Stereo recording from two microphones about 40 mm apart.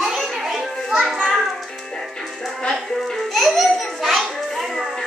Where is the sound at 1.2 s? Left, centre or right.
Centre.